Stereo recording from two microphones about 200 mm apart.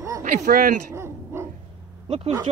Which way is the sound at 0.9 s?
10° right (ahead or behind).